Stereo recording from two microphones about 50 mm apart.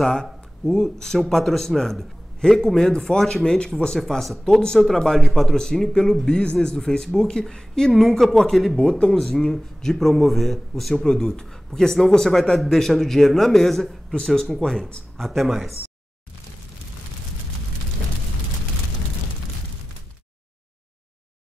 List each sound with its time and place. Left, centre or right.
0.0 s speech: centre
4.0 s speech: centre
4.5 s speech: centre
8.7 s speech: centre